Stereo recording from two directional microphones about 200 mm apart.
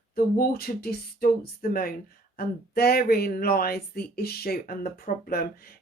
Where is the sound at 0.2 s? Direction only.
45° left (ahead or behind).